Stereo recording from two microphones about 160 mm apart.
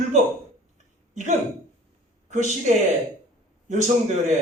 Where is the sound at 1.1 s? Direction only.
50° right (ahead or behind).